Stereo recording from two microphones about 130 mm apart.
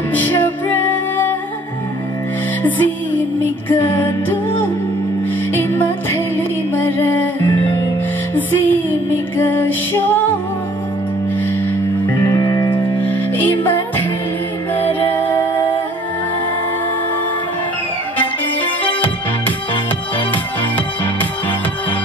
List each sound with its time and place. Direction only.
0.1 s music: 15° left (ahead or behind)
2.6 s music: 15° left (ahead or behind)
5.5 s music: 15° left (ahead or behind)
12.3 s music: 20° left (ahead or behind)
20.7 s music: 15° left (ahead or behind)